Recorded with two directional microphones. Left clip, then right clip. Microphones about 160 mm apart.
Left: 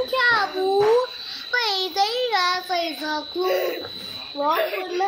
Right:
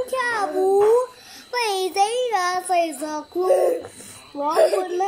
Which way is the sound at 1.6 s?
50° right (ahead or behind).